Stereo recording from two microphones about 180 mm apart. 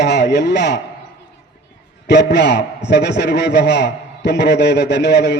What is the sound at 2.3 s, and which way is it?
A man's voice, 70° left (ahead or behind).